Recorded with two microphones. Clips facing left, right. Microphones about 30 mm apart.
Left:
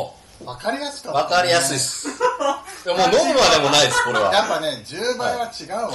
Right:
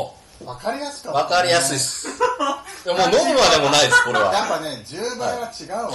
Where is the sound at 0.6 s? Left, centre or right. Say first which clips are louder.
Left 1 dB; left.